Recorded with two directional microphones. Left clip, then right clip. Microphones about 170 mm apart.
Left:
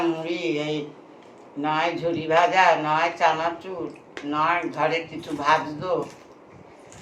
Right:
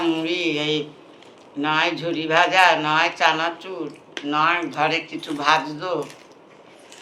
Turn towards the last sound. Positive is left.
turn(degrees=20)  # may be behind; listen again after turning